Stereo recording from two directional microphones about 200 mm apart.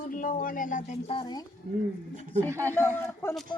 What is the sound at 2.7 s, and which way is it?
Speech, 10° left (ahead or behind).